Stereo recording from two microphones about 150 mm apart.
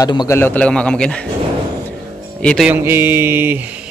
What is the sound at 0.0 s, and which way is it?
Speech, 25° left (ahead or behind).